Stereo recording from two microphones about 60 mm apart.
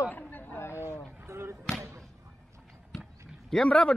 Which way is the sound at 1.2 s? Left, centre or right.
Right.